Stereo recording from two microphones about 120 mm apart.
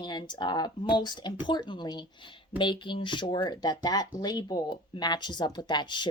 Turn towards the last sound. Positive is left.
turn(degrees=40)  # may be behind; listen again after turning